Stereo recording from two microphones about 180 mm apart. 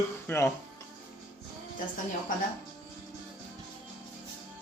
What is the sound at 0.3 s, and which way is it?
Speech, 15° left (ahead or behind).